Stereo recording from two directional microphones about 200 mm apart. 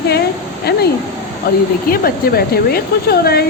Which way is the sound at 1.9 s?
50° left (ahead or behind).